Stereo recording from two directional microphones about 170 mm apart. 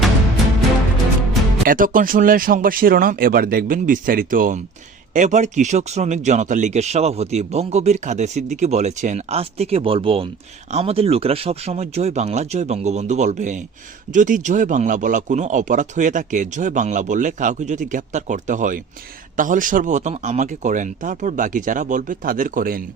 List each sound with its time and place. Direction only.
1.6 s speech: 55° right (ahead or behind)